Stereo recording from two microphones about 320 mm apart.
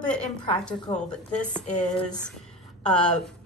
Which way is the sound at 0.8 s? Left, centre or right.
Left.